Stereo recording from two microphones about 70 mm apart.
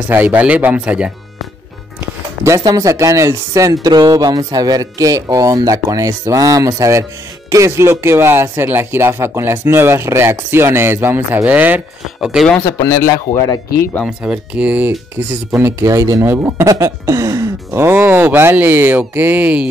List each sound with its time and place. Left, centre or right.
0.1 s speech: right
2.6 s speech: right
12.2 s speech: centre
12.6 s speech: left
14.0 s speech: centre
15.5 s a sound: right
16.3 s speech: right
16.6 s a sound: right
17.7 s speech: right; by 19.7 s centre